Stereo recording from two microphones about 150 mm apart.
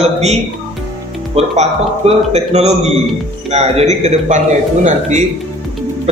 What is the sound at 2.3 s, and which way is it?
A man's voice, 45° right (ahead or behind).